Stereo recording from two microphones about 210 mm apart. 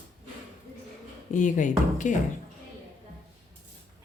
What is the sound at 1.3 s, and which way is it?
Speech, 35° left (ahead or behind).